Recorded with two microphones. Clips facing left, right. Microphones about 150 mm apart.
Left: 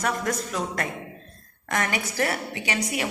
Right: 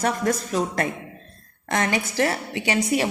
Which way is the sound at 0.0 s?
30° right (ahead or behind).